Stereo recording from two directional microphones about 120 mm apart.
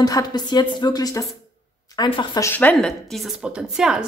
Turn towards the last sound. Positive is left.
turn(degrees=-5)  # may be behind; listen again after turning